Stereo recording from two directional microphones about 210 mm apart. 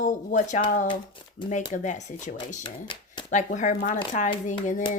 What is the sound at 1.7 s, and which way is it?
Speech, 35° left (ahead or behind).